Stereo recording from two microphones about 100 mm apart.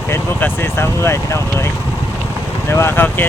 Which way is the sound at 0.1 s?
20° left (ahead or behind).